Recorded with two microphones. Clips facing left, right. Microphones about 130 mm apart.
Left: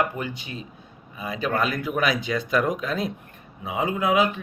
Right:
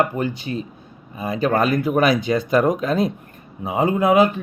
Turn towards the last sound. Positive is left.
turn(degrees=-45)  # may be behind; listen again after turning